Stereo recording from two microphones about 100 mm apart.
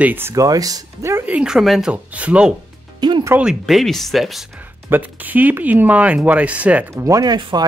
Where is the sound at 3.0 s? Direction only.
50° right (ahead or behind).